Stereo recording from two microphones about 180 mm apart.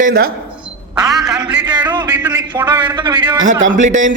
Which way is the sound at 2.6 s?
10° right (ahead or behind).